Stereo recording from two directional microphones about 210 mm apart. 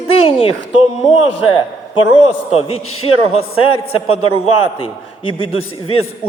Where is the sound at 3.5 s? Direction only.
90° left.